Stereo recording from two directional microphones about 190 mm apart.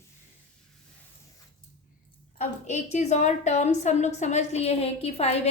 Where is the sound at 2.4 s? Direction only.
35° left (ahead or behind).